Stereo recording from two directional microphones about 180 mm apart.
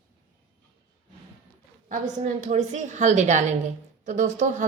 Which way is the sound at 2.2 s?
40° right (ahead or behind).